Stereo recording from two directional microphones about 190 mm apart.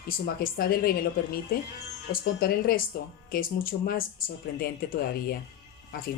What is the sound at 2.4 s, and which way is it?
A woman's voice, 50° left (ahead or behind).